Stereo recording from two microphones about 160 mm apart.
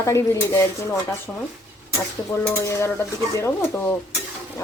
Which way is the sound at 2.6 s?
20° left (ahead or behind).